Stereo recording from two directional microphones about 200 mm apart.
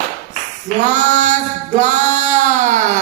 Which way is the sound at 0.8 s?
40° right (ahead or behind).